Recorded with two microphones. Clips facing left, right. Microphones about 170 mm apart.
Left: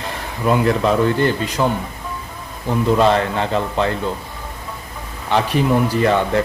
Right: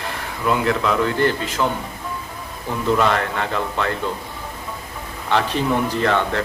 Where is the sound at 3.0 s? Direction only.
20° left (ahead or behind).